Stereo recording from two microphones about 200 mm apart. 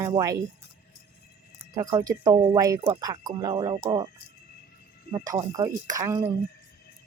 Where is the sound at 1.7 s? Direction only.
20° right (ahead or behind).